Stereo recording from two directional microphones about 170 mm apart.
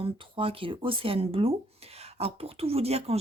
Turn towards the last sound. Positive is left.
turn(degrees=-35)  # may be behind; listen again after turning